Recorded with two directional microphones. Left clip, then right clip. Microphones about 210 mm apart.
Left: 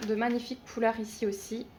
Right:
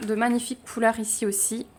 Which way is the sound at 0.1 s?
45° right (ahead or behind).